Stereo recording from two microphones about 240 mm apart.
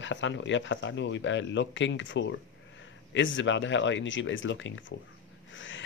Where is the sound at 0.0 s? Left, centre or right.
Left.